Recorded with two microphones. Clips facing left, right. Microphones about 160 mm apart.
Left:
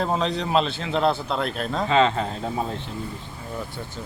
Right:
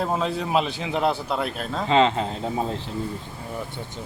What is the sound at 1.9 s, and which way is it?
Speech, 25° right (ahead or behind).